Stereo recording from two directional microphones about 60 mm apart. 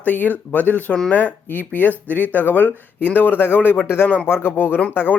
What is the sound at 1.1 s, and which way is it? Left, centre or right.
Speech, left.